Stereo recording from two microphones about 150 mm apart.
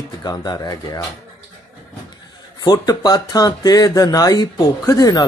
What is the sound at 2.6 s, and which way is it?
Speech, 25° left (ahead or behind).